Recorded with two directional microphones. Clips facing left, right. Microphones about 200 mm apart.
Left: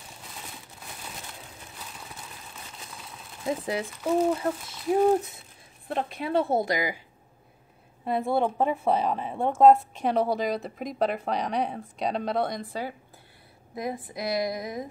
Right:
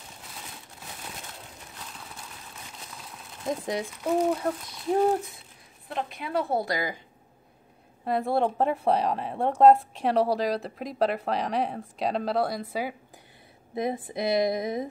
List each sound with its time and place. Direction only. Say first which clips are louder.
3.4 s a woman's voice: left 1 dB; 5° left (ahead or behind)
6.1 s a woman's voice: left 3 dB; 25° left (ahead or behind)
8.0 s a woman's voice: even; centre (ahead or behind)
13.7 s a woman's voice: right 4 dB; 25° right (ahead or behind)